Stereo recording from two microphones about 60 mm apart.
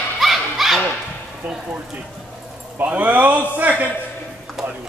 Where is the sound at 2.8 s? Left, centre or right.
Right.